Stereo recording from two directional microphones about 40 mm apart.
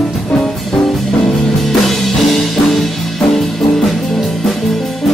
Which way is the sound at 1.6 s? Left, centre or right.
Centre.